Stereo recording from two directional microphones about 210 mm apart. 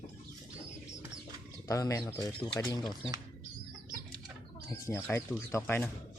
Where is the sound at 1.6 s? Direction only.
15° left (ahead or behind).